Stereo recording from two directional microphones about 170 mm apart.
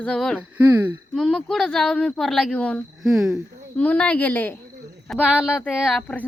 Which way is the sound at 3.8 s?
5° left (ahead or behind).